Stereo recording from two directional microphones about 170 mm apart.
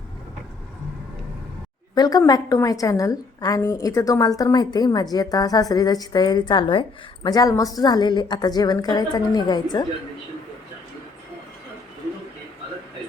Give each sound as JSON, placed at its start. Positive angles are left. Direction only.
{"t": 2.0, "sound": "a woman's voice", "side_deg": 25}